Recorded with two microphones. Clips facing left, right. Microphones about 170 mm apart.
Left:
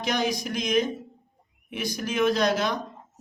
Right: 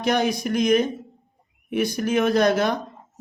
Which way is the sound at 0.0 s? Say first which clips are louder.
Right 5 dB; 55° right (ahead or behind).